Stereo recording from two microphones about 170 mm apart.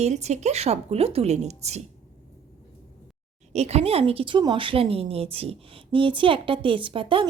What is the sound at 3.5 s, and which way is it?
A woman's voice, 40° right (ahead or behind).